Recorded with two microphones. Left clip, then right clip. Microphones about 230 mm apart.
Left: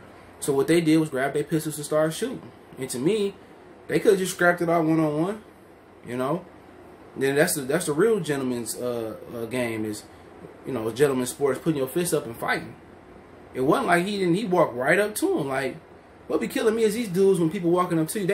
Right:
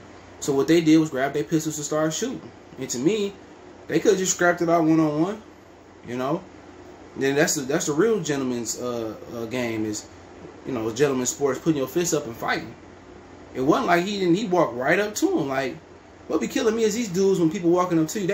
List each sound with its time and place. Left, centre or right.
0.5 s speech: centre